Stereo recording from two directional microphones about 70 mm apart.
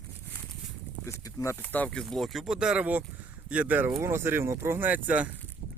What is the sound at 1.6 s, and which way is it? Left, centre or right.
Speech, left.